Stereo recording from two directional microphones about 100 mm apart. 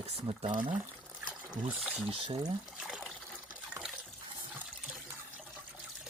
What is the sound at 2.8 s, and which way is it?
Water, centre (ahead or behind).